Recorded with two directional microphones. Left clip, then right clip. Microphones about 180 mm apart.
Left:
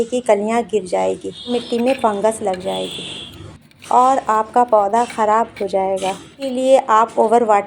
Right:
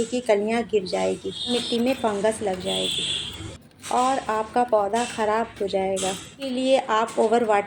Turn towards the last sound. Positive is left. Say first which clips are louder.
# left 7 dB
turn(degrees=20)  # may be behind; listen again after turning